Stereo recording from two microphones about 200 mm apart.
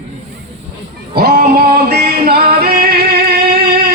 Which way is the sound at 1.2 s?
50° right (ahead or behind).